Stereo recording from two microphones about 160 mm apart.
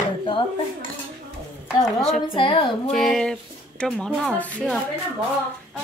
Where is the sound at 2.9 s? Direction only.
Centre (ahead or behind).